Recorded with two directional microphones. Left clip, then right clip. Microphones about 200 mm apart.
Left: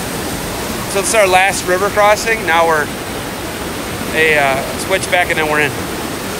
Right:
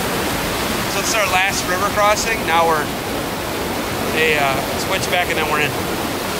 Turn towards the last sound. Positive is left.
turn(degrees=-15)  # may be behind; listen again after turning